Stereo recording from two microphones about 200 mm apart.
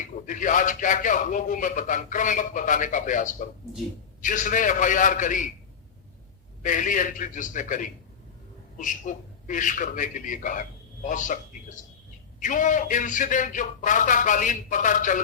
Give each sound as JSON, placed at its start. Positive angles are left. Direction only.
{"t": 0.0, "sound": "speech", "side_deg": 40}
{"t": 6.6, "sound": "speech", "side_deg": 40}